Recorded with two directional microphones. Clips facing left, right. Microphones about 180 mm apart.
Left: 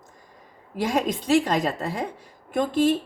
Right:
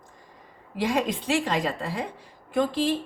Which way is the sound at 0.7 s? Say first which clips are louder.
Left 1 dB; 45° left (ahead or behind).